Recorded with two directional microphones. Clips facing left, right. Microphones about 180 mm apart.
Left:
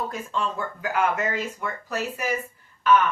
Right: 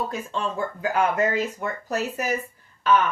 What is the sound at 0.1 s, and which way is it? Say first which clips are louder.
Speech: even; 25° right (ahead or behind).